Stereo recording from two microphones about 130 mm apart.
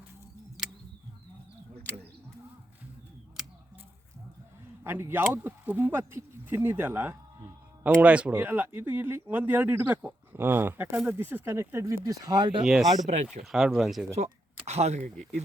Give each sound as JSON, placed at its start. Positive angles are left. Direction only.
{"t": 4.8, "sound": "speech", "side_deg": -20}
{"t": 12.6, "sound": "speech", "side_deg": 0}
{"t": 14.7, "sound": "speech", "side_deg": -55}